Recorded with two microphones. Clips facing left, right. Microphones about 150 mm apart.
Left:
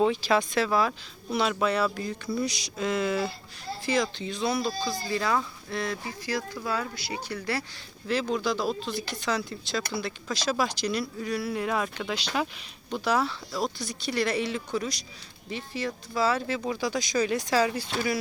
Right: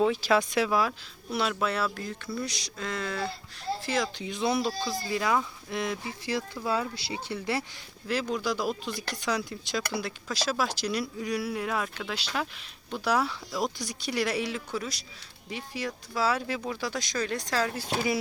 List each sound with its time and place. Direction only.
0.0 s speech: 10° right (ahead or behind); by 3.3 s 5° left (ahead or behind)
3.8 s speech: 5° right (ahead or behind)
4.3 s speech: 20° right (ahead or behind)
5.0 s speech: 10° right (ahead or behind)
8.0 s speech: 5° right (ahead or behind)